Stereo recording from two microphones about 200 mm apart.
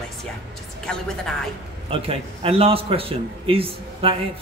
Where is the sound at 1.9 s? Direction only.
30° right (ahead or behind).